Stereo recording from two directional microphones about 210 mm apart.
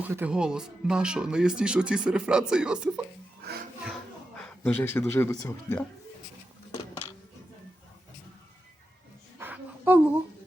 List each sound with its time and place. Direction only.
0.0 s speech: 10° right (ahead or behind)
3.4 s speech: 50° right (ahead or behind)
4.4 s speech: 5° left (ahead or behind)
9.4 s a sound: 10° right (ahead or behind)